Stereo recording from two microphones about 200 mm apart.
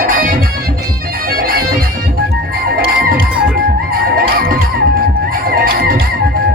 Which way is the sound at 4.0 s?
45° right (ahead or behind).